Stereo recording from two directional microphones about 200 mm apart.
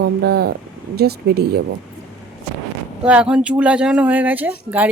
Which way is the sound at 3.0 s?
5° right (ahead or behind).